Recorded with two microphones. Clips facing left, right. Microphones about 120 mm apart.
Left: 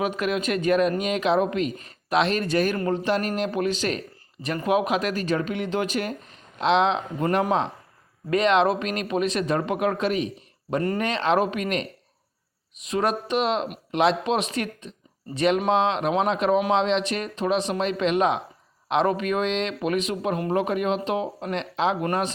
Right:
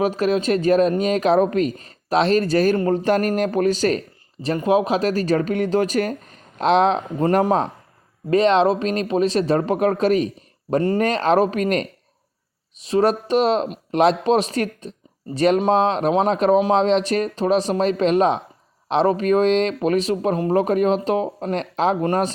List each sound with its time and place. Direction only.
0.0 s speech: 35° right (ahead or behind)
4.4 s speech: 30° right (ahead or behind)